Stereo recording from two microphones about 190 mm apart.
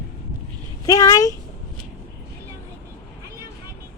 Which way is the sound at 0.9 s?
15° left (ahead or behind).